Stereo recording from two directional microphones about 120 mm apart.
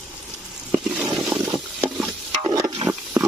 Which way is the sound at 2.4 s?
30° right (ahead or behind).